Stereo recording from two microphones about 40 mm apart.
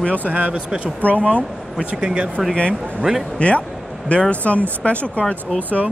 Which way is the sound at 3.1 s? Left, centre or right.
Centre.